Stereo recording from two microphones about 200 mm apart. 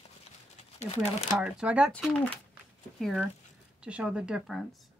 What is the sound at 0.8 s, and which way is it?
Speech, 30° left (ahead or behind).